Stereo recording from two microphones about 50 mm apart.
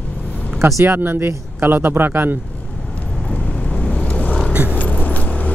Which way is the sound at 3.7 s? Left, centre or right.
Left.